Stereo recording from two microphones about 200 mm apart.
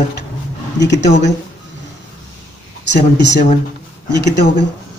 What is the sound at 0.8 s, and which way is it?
Speech, 60° left (ahead or behind).